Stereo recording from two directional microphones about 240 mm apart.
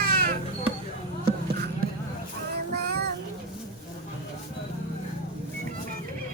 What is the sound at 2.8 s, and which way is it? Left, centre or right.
Child singing, right.